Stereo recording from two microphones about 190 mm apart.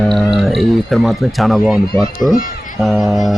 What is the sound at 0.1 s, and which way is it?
A man's voice, centre (ahead or behind).